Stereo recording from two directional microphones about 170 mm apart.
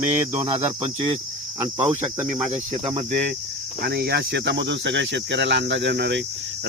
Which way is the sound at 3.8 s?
70° right (ahead or behind).